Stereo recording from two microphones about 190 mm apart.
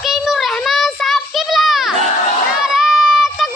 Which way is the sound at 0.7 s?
Centre (ahead or behind).